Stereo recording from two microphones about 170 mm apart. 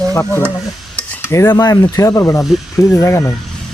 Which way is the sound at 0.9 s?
15° left (ahead or behind).